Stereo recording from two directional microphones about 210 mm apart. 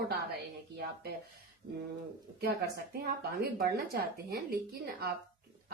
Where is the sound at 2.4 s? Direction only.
50° right (ahead or behind).